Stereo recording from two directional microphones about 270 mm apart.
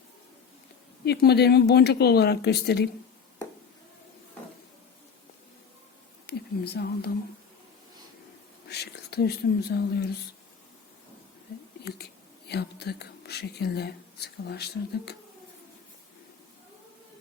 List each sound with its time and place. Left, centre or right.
1.0 s speech: left
6.2 s a sound: left
8.7 s speech: left
11.8 s whispering: left
12.5 s speech: left